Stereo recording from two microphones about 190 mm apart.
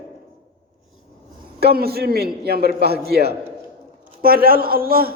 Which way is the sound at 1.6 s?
55° right (ahead or behind).